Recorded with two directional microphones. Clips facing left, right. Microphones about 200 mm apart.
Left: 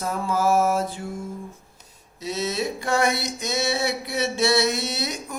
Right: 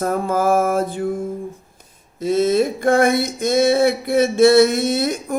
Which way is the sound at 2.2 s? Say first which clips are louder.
Right 10 dB; 50° right (ahead or behind).